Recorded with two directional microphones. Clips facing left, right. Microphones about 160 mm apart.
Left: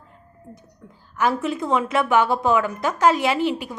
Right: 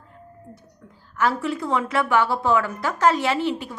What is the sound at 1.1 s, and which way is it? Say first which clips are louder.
A woman's voice: left 1 dB; 15° left (ahead or behind).